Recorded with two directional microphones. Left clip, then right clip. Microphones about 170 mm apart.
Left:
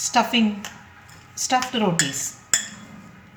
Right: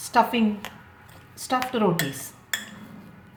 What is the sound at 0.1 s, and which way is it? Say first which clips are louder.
Speech: even; 20° right (ahead or behind).